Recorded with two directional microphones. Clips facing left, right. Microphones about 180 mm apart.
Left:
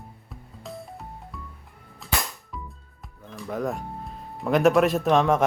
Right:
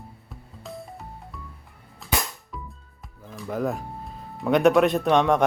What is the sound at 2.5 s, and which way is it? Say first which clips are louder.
Music: even; centre (ahead or behind).